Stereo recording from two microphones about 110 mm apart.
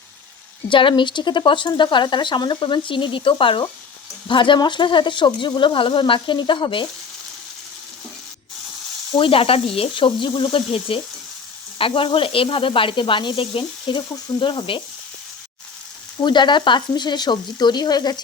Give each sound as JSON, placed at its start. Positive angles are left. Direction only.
{"t": 0.7, "sound": "speech", "side_deg": 50}
{"t": 9.1, "sound": "sizzle", "side_deg": 55}
{"t": 11.8, "sound": "speech", "side_deg": 55}
{"t": 16.2, "sound": "speech", "side_deg": 45}